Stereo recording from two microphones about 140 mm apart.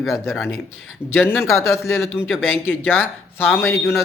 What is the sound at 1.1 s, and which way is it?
A man's voice, 15° left (ahead or behind).